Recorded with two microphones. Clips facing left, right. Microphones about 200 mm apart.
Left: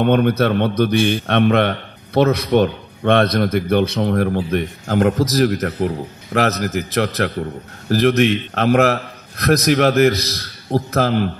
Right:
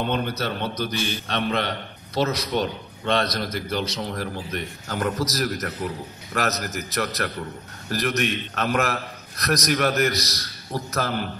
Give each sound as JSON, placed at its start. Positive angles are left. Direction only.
{"t": 0.0, "sound": "a man's voice", "side_deg": 60}